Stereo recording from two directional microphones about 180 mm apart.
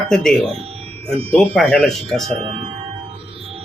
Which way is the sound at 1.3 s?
5° left (ahead or behind).